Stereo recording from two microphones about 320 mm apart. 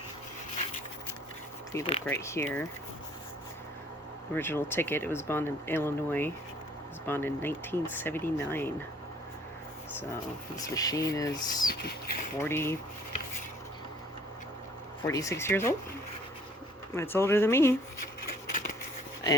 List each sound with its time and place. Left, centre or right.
1.7 s speech: centre
4.4 s speech: centre
10.6 s speech: centre
11.7 s speech: left
12.4 s speech: centre
15.0 s speech: centre
16.9 s speech: centre